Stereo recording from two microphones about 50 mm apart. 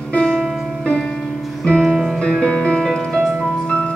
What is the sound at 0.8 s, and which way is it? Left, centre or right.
Music, centre.